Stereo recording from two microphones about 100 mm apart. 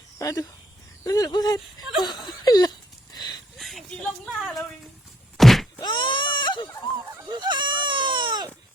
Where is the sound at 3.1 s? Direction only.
45° left (ahead or behind).